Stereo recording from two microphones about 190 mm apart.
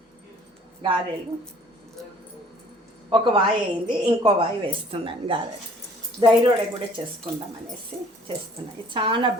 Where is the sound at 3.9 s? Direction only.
25° right (ahead or behind).